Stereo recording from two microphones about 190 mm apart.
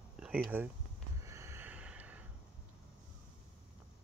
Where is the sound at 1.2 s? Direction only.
15° right (ahead or behind).